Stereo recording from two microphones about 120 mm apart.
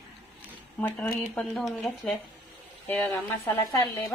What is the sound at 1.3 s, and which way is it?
Speech, 5° left (ahead or behind).